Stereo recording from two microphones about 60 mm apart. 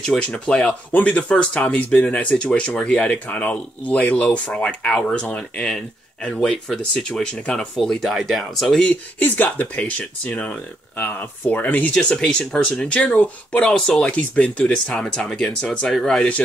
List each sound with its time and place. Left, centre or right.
0.0 s speech: centre
7.7 s speech: centre
9.2 s speech: left
11.9 s speech: centre